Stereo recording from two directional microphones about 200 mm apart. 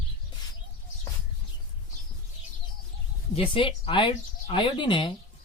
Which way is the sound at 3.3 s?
25° left (ahead or behind).